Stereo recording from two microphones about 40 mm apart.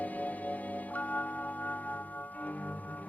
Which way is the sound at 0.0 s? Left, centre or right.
Left.